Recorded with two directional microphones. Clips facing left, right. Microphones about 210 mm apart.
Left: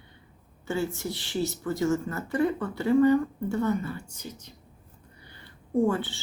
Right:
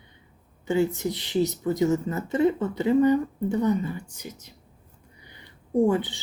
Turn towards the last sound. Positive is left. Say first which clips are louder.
# right 3 dB
turn(degrees=-15)  # may be behind; listen again after turning